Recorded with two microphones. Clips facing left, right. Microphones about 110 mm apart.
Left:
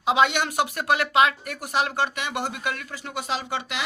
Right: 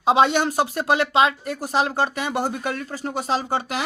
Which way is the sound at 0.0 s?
35° right (ahead or behind).